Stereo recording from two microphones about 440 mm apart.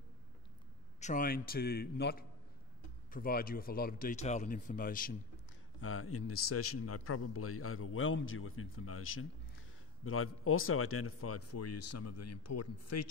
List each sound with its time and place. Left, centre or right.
1.0 s a man's voice: centre; by 13.1 s left